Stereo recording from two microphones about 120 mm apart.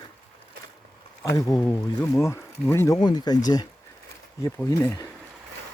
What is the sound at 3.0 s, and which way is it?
Speech, 35° left (ahead or behind).